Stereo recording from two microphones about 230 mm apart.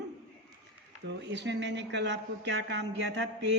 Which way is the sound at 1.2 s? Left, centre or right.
Right.